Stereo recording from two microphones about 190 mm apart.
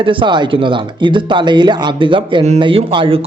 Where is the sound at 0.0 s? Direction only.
25° right (ahead or behind).